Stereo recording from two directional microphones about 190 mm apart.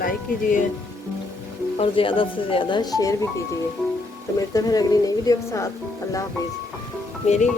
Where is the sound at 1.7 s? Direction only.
30° left (ahead or behind).